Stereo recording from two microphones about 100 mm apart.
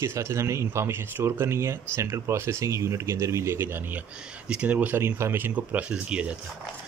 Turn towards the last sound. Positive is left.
turn(degrees=-10)  # may be behind; listen again after turning